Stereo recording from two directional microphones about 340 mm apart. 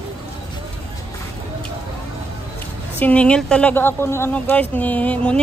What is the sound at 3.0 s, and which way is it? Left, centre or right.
A woman's voice, centre.